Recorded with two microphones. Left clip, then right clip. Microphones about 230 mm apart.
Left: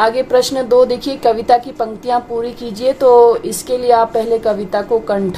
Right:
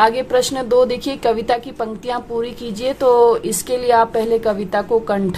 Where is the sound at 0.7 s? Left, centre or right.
Right.